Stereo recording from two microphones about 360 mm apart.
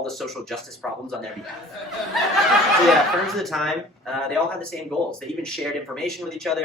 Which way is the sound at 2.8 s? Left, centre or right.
Centre.